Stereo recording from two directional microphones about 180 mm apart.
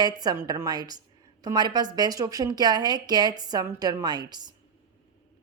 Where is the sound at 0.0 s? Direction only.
20° right (ahead or behind).